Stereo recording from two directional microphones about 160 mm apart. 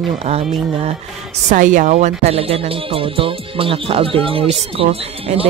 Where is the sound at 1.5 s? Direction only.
55° right (ahead or behind).